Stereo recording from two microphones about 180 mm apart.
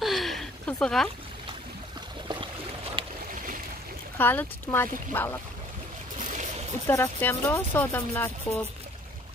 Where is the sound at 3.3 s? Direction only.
50° right (ahead or behind).